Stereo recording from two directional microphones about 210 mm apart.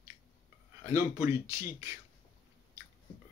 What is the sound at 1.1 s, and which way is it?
Speech, 15° right (ahead or behind).